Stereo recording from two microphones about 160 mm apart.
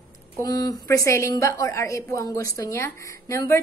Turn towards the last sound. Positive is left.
turn(degrees=20)  # may be behind; listen again after turning